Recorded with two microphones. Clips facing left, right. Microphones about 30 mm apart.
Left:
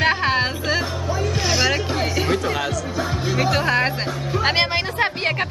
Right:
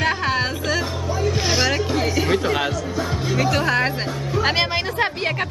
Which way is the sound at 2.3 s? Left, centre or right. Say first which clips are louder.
Right 2 dB; centre.